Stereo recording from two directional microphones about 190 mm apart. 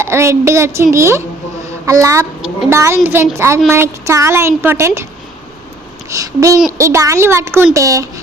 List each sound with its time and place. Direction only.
0.0 s a woman's voice: 15° right (ahead or behind)
6.1 s a woman's voice: 15° right (ahead or behind)